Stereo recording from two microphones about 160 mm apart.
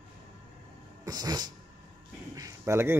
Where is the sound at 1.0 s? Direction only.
25° right (ahead or behind).